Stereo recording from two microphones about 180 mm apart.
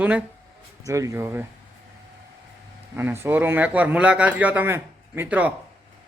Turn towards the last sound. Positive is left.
turn(degrees=-10)  # may be behind; listen again after turning